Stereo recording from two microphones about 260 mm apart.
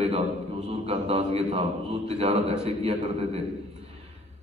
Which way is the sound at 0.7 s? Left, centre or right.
Right.